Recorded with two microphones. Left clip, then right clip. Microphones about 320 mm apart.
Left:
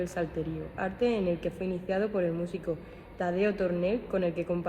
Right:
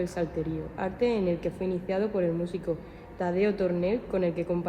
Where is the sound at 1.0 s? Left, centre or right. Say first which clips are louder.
Right 2 dB; left.